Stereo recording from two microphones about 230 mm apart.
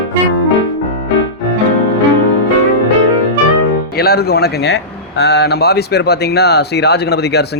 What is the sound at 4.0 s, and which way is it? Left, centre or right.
Speech, left.